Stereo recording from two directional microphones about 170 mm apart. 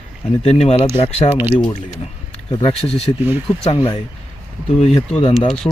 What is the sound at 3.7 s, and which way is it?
Speech, 30° left (ahead or behind).